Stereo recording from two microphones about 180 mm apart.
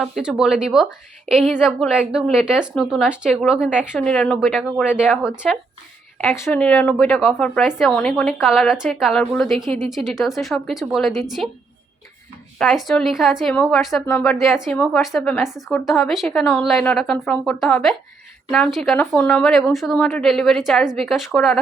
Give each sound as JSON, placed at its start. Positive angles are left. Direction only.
{"t": 0.0, "sound": "speech", "side_deg": -5}
{"t": 6.4, "sound": "speech", "side_deg": 10}
{"t": 12.5, "sound": "speech", "side_deg": 0}